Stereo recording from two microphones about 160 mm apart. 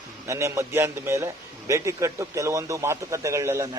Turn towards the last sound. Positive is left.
turn(degrees=-20)  # may be behind; listen again after turning